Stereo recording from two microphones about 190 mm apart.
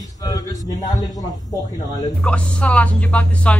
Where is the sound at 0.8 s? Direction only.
20° left (ahead or behind).